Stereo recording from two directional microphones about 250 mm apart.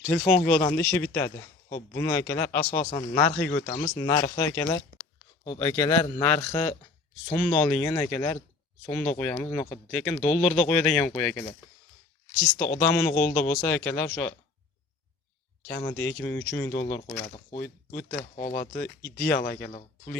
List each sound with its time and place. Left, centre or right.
0.0 s speech: centre
2.6 s speech: left
3.2 s speech: centre
3.5 s speech: left
3.9 s speech: centre
10.2 s speech: left
10.4 s speech: centre
12.5 s speech: centre
15.6 s speech: centre
18.3 s speech: left